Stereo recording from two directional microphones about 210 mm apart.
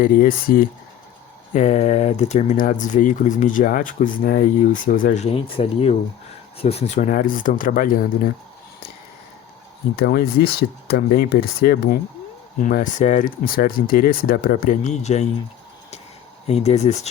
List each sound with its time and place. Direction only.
0.0 s speech: 45° left (ahead or behind)
9.9 s speech: 45° left (ahead or behind)
16.5 s speech: 30° left (ahead or behind)